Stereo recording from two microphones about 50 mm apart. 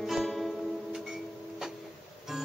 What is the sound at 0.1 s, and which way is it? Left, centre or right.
Music, centre.